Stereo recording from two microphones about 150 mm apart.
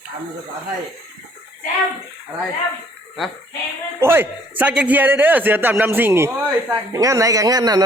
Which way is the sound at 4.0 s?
15° right (ahead or behind).